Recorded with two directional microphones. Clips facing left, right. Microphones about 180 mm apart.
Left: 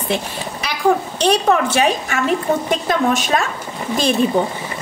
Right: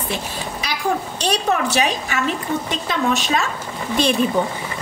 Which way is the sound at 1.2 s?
55° left (ahead or behind).